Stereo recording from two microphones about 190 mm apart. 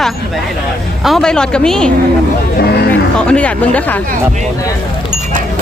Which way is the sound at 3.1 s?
5° left (ahead or behind).